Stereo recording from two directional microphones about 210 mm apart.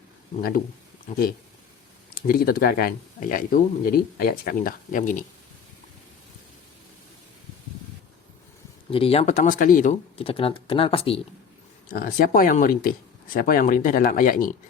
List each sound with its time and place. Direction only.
1.1 s speech: 45° left (ahead or behind)
8.9 s speech: 25° left (ahead or behind)
11.9 s speech: 40° left (ahead or behind)